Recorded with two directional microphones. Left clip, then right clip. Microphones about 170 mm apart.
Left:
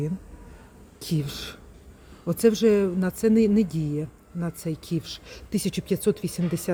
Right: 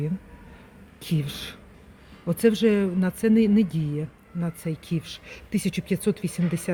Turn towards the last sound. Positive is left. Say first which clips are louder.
# even
turn(degrees=5)  # may be behind; listen again after turning